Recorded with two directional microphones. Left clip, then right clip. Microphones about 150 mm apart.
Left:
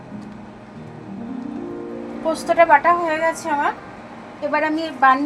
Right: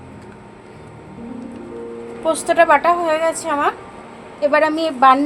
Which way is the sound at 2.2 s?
70° right (ahead or behind).